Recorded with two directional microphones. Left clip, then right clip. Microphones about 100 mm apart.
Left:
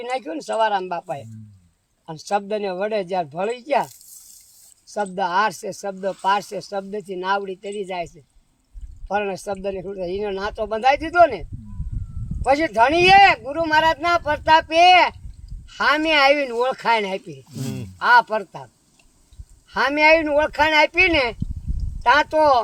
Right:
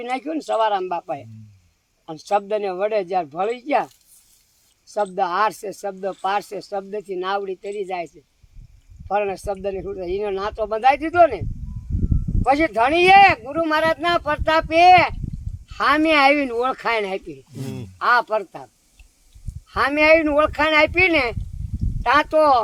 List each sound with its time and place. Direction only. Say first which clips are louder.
0.0 s speech: right 1 dB; 25° right (ahead or behind)
5.1 s speech: left 1 dB; 30° right (ahead or behind)
12.5 s speech: left 1 dB; 25° right (ahead or behind)
17.5 s a sound: left 4 dB; centre (ahead or behind)
18.0 s speech: left 2 dB; 25° right (ahead or behind)
19.7 s speech: even; 25° right (ahead or behind)